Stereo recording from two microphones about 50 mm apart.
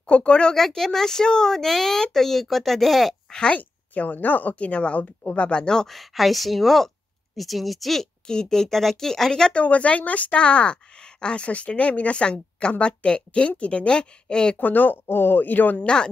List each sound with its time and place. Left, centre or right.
0.0 s a woman's voice: left
0.6 s speech: centre
3.3 s speech: centre
3.5 s a woman's voice: left
5.9 s speech: centre
8.3 s speech: centre
9.6 s a woman's voice: left
14.6 s speech: left
15.0 s speech: left
15.8 s a woman's voice: centre